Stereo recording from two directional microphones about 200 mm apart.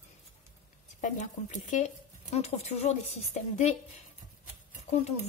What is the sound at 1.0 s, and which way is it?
Speech, 40° left (ahead or behind).